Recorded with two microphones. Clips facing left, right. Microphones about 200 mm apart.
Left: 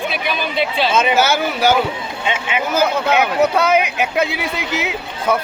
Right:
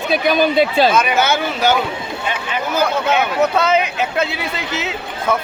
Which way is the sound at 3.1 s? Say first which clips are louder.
Left 1 dB; 10° left (ahead or behind).